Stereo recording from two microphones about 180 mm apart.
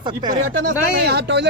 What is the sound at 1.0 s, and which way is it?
Speech, 65° right (ahead or behind).